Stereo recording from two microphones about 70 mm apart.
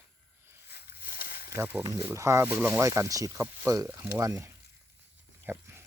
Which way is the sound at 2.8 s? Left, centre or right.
Right.